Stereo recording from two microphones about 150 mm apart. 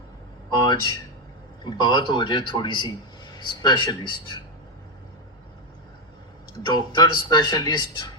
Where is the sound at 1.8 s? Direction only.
30° left (ahead or behind).